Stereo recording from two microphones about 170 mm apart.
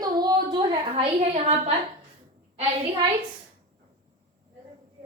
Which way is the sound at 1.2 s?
40° right (ahead or behind).